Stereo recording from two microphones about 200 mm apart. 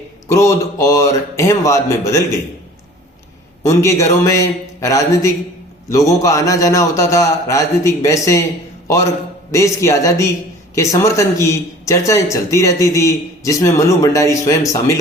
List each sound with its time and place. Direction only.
0.3 s a man's voice: 15° left (ahead or behind)
3.6 s a man's voice: 15° left (ahead or behind)
9.5 s a man's voice: 15° left (ahead or behind)